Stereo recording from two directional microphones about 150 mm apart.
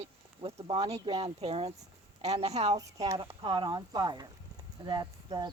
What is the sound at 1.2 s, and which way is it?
Speech, 40° right (ahead or behind).